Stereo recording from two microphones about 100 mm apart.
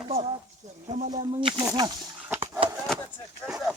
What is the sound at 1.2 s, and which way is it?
Speech, 60° right (ahead or behind).